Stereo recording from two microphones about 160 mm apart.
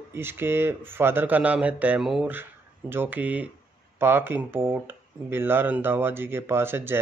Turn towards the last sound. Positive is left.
turn(degrees=-15)  # may be behind; listen again after turning